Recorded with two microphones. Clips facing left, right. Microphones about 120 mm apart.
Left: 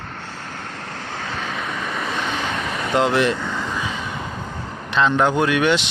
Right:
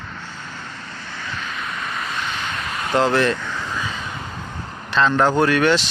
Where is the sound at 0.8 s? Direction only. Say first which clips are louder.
Left 4 dB; 65° left (ahead or behind).